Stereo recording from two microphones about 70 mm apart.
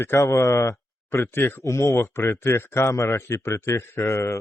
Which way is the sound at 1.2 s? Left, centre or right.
Left.